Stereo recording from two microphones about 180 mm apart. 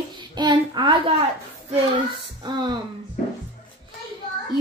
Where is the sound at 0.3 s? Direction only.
25° right (ahead or behind).